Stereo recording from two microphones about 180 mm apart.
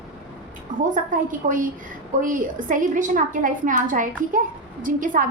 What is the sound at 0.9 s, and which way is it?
A woman's voice, 45° right (ahead or behind).